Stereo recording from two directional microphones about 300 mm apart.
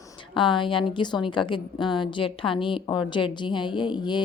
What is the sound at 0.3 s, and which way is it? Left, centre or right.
A woman's voice, centre.